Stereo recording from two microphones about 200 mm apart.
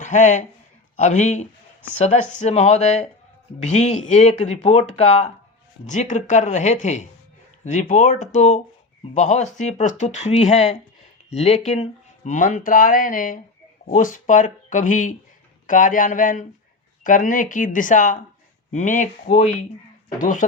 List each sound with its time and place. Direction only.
0.0 s speech: 35° left (ahead or behind)